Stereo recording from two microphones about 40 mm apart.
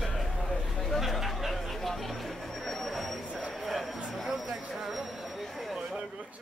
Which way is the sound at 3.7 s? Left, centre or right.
Centre.